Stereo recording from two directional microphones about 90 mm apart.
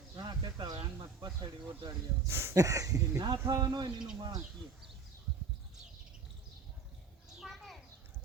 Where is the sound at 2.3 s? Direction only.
30° right (ahead or behind).